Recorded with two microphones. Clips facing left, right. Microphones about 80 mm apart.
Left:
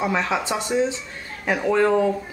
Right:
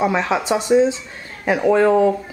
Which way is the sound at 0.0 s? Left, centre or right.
Centre.